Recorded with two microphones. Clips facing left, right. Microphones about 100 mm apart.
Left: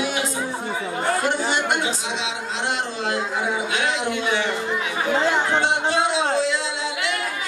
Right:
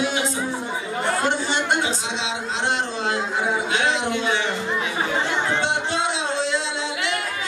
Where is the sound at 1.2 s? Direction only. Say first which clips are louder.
Even; 25° right (ahead or behind).